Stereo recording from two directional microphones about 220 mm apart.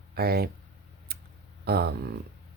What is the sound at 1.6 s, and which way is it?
Speech, 45° right (ahead or behind).